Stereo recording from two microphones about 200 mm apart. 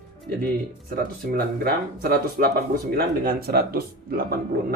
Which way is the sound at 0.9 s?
50° right (ahead or behind).